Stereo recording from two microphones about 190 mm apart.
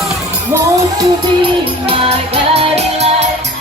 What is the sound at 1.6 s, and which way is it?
Music, 30° right (ahead or behind).